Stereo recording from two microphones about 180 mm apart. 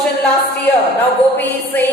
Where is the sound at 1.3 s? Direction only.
10° left (ahead or behind).